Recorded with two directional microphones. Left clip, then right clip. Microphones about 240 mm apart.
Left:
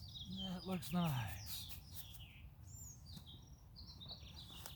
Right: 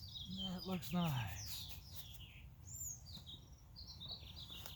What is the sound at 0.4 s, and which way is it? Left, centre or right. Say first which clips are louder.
Speech: even; centre.